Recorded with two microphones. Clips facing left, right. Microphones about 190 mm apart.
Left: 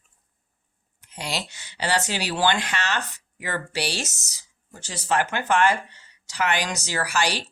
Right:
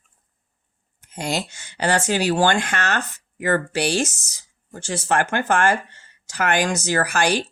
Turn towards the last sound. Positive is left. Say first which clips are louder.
# right 5 dB
turn(degrees=-50)  # may be behind; listen again after turning